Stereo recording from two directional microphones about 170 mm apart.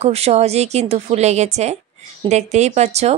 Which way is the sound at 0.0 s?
40° right (ahead or behind).